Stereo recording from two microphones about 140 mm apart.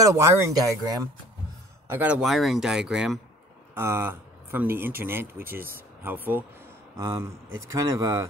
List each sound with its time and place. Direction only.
0.0 s speech: 20° right (ahead or behind)
1.9 s speech: 10° right (ahead or behind)
2.2 s speech: centre (ahead or behind)
3.7 s speech: 15° right (ahead or behind)